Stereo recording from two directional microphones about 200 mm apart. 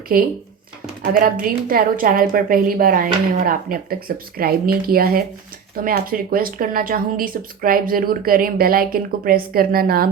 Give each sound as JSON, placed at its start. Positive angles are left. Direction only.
{"t": 0.1, "sound": "speech", "side_deg": -45}